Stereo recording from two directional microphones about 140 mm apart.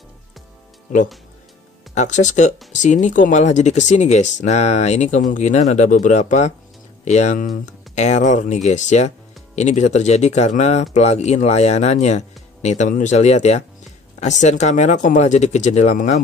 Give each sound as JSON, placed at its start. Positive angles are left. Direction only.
{"t": 2.0, "sound": "speech", "side_deg": 60}